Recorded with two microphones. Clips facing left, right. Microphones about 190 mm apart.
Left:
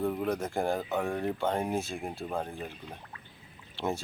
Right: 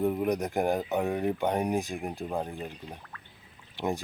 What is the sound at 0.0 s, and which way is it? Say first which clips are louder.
Speech: right 3 dB; 20° right (ahead or behind).